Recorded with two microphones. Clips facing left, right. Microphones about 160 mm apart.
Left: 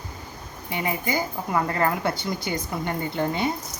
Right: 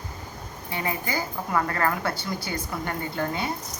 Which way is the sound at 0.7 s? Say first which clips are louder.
Left 3 dB; 20° left (ahead or behind).